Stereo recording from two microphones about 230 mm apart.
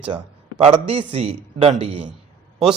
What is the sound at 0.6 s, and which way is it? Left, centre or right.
A man's voice, right.